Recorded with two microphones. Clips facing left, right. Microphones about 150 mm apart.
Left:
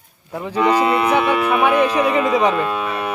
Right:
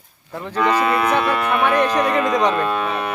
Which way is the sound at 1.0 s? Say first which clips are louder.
Left 2 dB; 5° left (ahead or behind).